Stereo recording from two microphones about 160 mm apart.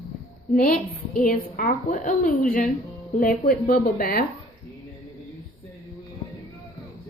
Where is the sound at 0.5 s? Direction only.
60° left (ahead or behind).